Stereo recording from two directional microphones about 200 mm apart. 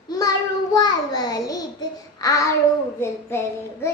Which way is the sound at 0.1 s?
20° left (ahead or behind).